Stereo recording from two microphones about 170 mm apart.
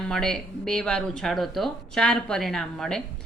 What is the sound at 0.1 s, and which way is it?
A woman's voice, 5° left (ahead or behind).